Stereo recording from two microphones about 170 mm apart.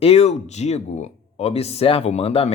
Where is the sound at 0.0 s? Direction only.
40° left (ahead or behind).